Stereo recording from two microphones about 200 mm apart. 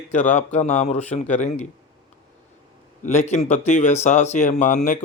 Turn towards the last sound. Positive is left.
turn(degrees=40)  # may be behind; listen again after turning